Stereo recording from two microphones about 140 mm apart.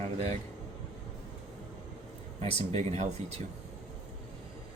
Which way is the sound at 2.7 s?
55° right (ahead or behind).